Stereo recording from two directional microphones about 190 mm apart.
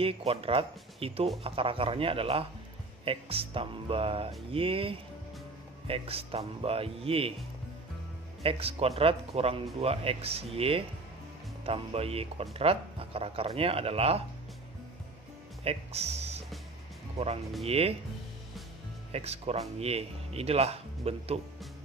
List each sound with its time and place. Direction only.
0.0 s speech: 30° right (ahead or behind)
8.4 s speech: 30° right (ahead or behind)
15.6 s speech: 30° right (ahead or behind)
17.6 s speech: 30° right (ahead or behind)
19.1 s speech: 35° right (ahead or behind)